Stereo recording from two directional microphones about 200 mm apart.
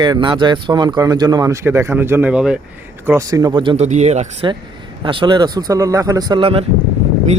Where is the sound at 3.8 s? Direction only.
35° right (ahead or behind).